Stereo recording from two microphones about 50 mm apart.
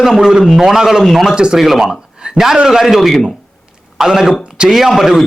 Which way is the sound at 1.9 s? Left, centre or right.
Centre.